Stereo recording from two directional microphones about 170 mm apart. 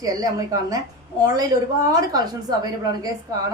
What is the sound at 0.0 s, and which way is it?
A woman's voice, 20° right (ahead or behind).